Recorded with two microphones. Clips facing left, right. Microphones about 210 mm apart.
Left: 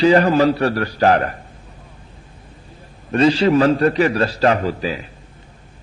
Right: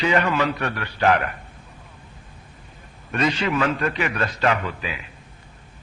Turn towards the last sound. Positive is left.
turn(degrees=35)  # may be behind; listen again after turning